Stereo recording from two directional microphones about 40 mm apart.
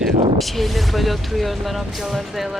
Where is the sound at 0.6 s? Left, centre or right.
Centre.